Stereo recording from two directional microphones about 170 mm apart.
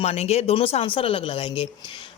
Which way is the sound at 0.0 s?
40° left (ahead or behind).